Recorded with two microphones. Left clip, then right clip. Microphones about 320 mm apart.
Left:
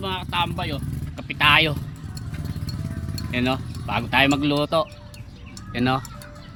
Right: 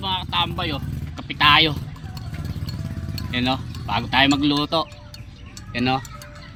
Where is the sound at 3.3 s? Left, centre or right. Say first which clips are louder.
Right 1 dB; centre.